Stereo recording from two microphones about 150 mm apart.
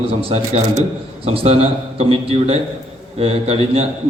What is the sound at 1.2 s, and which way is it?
A man's voice, 40° right (ahead or behind).